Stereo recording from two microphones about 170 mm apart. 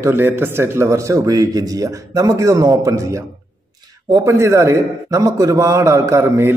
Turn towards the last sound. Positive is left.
turn(degrees=-15)  # may be behind; listen again after turning